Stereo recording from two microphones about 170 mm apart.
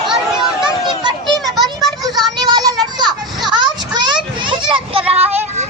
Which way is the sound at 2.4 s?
25° right (ahead or behind).